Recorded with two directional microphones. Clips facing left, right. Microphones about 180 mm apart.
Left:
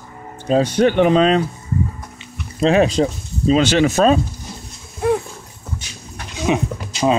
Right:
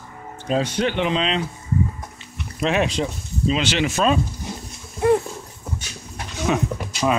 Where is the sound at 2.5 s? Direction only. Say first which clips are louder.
Left 7 dB; 35° left (ahead or behind).